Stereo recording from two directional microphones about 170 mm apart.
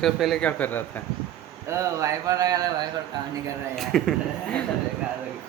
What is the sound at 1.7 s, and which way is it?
A man's voice, 20° right (ahead or behind).